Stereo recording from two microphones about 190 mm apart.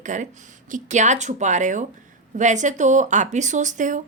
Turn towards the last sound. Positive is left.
turn(degrees=-40)  # may be behind; listen again after turning